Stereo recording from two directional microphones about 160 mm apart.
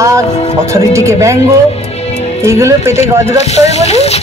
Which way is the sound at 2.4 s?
20° right (ahead or behind).